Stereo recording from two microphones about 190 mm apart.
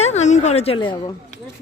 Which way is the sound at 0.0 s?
35° left (ahead or behind).